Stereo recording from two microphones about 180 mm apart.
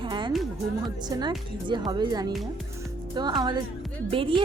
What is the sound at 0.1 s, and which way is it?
Music, 25° right (ahead or behind).